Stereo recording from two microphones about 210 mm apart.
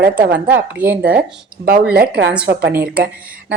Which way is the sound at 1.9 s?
50° right (ahead or behind).